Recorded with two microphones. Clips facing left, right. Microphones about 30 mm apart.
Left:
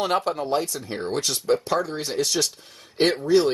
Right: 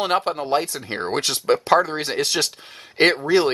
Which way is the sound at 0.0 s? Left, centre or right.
Right.